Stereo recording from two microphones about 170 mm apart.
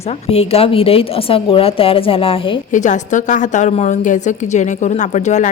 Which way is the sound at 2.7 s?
45° left (ahead or behind).